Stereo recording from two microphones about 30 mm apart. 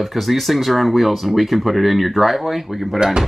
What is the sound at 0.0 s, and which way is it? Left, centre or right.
Speech, centre.